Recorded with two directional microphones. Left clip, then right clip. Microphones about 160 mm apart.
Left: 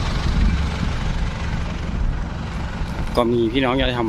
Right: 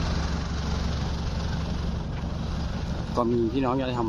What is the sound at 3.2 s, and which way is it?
Speech, 15° left (ahead or behind).